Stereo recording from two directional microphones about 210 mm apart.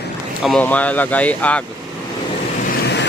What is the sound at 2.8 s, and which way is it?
Vehicle, 50° left (ahead or behind).